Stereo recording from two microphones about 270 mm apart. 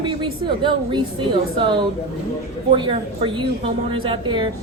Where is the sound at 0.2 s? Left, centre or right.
Centre.